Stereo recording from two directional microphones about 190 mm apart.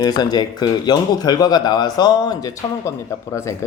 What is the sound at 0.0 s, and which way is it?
Speech, 20° left (ahead or behind).